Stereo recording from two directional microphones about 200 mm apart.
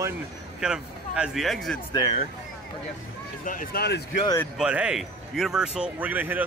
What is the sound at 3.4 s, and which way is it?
Speech, 45° left (ahead or behind).